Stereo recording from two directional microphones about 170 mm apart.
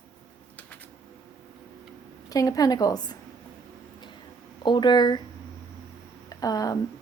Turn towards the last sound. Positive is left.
turn(degrees=20)  # may be behind; listen again after turning